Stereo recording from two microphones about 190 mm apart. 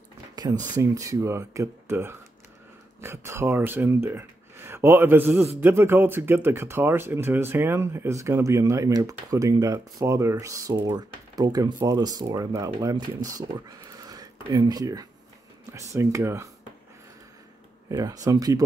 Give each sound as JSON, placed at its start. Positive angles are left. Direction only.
{"t": 0.4, "sound": "speech", "side_deg": -20}
{"t": 17.8, "sound": "speech", "side_deg": -20}